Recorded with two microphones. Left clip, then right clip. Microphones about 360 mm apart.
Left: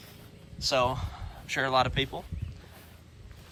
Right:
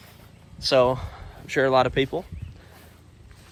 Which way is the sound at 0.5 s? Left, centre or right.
Centre.